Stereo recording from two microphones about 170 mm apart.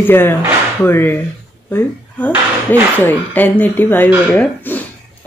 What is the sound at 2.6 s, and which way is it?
Speech, 10° left (ahead or behind).